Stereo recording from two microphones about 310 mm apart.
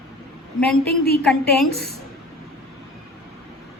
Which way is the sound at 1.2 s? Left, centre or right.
Centre.